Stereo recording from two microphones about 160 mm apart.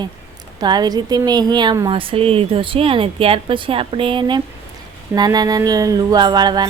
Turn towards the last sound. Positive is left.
turn(degrees=-25)  # may be behind; listen again after turning